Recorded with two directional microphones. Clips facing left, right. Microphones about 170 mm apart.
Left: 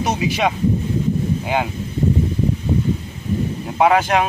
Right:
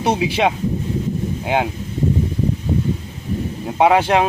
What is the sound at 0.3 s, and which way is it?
Speech, 25° right (ahead or behind).